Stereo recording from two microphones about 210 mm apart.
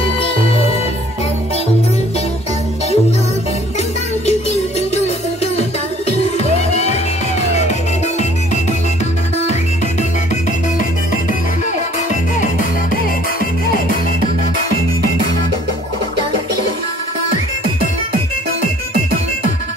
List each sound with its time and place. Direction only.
4.3 s music: 30° left (ahead or behind)